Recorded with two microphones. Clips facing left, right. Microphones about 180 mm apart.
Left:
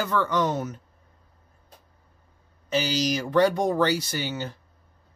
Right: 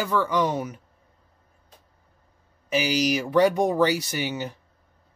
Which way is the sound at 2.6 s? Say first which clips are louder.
Right 2 dB; 15° right (ahead or behind).